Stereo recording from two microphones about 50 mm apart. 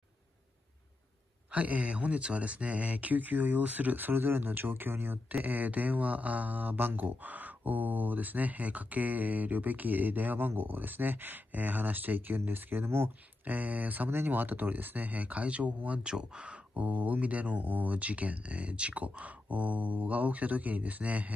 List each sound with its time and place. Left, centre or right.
1.5 s speech: right
13.5 s speech: right